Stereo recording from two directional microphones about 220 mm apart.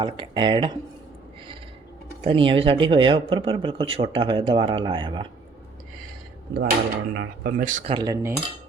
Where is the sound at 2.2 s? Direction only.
25° right (ahead or behind).